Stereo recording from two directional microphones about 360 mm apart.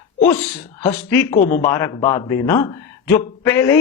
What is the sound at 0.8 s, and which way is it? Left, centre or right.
Speech, left.